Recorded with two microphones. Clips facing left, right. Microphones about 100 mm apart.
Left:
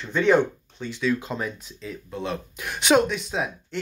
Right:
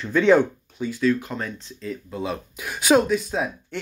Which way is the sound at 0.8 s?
5° right (ahead or behind).